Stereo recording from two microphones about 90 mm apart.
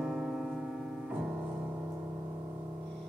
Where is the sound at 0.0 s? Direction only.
5° right (ahead or behind).